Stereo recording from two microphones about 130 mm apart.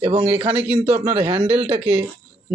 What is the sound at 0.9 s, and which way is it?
Speech, 50° right (ahead or behind).